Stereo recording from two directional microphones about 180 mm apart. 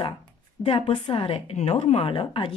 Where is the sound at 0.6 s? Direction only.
30° left (ahead or behind).